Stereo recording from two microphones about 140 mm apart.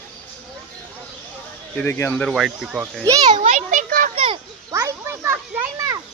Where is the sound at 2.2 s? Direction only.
5° right (ahead or behind).